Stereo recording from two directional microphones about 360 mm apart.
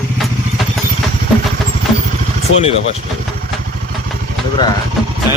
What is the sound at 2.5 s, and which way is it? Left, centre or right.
Speech, left.